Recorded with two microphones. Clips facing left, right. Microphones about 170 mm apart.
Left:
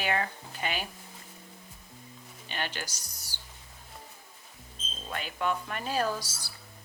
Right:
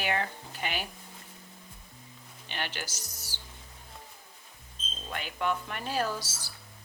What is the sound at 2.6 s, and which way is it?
Speech, 15° left (ahead or behind).